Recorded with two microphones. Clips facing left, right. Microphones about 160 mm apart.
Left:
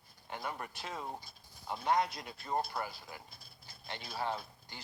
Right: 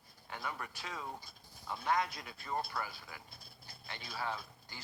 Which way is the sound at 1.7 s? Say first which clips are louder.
Left 3 dB; 25° left (ahead or behind).